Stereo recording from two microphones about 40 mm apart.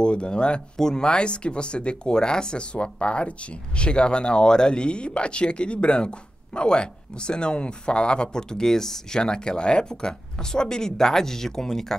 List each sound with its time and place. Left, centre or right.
0.0 s speech: left